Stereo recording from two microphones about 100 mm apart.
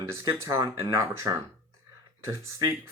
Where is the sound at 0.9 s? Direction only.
35° right (ahead or behind).